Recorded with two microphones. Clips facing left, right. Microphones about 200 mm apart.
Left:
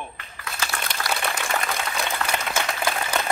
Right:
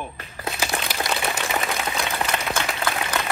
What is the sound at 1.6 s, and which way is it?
Applause, 5° right (ahead or behind).